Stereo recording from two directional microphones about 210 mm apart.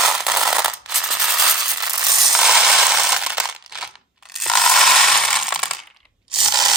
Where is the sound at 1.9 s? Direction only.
15° right (ahead or behind).